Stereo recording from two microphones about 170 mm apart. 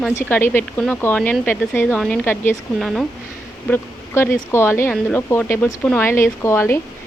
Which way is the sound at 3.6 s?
10° left (ahead or behind).